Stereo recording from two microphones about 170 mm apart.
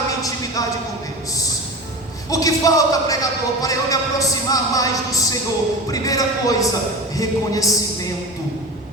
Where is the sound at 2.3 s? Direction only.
20° left (ahead or behind).